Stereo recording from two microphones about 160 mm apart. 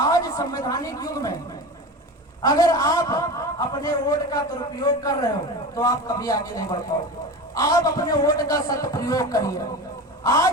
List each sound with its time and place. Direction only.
0.0 s a woman's voice: 20° left (ahead or behind)
2.4 s a man's voice: 25° left (ahead or behind)